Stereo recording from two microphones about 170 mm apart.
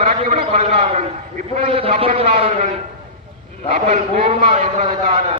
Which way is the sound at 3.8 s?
40° right (ahead or behind).